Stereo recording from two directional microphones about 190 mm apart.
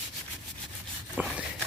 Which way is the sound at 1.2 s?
10° right (ahead or behind).